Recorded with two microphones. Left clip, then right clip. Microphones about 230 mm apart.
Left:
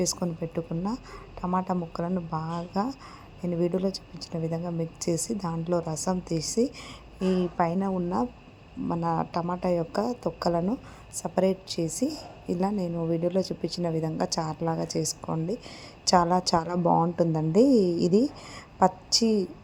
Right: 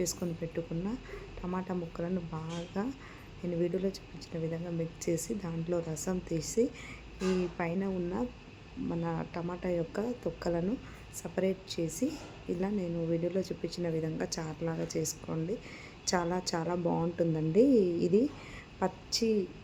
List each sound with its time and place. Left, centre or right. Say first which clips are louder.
0.0 s a woman's voice: left 6 dB; left